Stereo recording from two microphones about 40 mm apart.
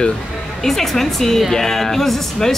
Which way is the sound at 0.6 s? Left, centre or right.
Centre.